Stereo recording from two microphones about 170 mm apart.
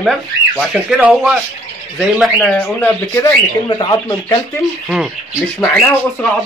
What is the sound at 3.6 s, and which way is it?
Speech, 25° left (ahead or behind).